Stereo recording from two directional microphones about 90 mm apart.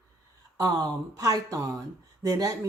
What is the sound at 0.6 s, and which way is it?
Speech, 45° right (ahead or behind).